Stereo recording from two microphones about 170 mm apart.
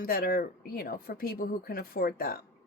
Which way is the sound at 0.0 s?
60° left (ahead or behind).